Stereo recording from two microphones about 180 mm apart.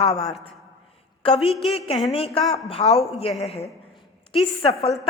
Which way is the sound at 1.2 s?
30° left (ahead or behind).